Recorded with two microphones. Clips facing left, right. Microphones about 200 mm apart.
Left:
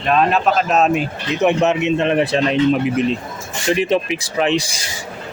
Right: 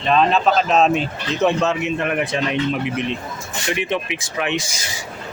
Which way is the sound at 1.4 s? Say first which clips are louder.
Left 3 dB; 20° left (ahead or behind).